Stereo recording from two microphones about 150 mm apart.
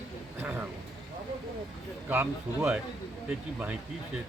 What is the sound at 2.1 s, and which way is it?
Speech, 15° right (ahead or behind).